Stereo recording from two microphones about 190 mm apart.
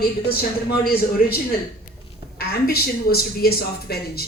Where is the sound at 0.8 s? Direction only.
50° left (ahead or behind).